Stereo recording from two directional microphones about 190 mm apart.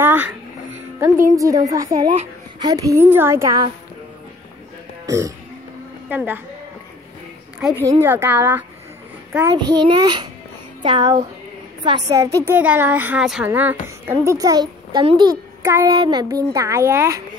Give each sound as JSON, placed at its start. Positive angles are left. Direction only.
{"t": 0.0, "sound": "music", "side_deg": -10}
{"t": 0.9, "sound": "speech", "side_deg": -15}
{"t": 5.0, "sound": "a woman's voice", "side_deg": -15}
{"t": 7.6, "sound": "a child's voice", "side_deg": -15}